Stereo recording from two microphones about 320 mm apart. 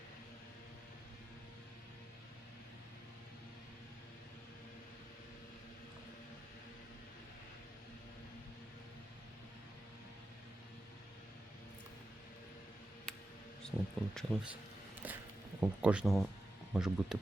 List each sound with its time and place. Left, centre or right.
13.6 s speech: centre
15.0 s a sound: centre
15.6 s speech: centre